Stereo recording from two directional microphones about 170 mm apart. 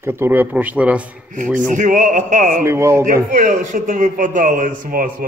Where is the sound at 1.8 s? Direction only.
50° right (ahead or behind).